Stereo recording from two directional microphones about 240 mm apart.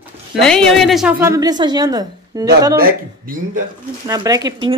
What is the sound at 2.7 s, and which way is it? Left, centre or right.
Speech, right.